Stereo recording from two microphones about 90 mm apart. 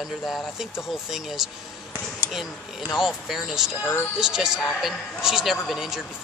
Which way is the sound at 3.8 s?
30° left (ahead or behind).